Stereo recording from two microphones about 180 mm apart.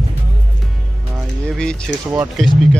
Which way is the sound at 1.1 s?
Centre (ahead or behind).